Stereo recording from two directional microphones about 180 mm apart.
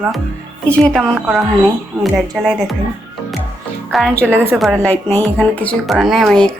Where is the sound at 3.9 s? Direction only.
5° left (ahead or behind).